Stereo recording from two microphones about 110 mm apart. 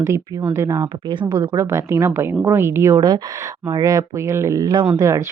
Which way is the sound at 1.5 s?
25° right (ahead or behind).